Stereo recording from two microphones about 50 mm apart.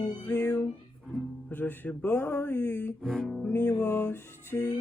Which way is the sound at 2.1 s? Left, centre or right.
Left.